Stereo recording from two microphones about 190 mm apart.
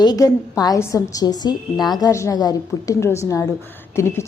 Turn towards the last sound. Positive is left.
turn(degrees=15)  # may be behind; listen again after turning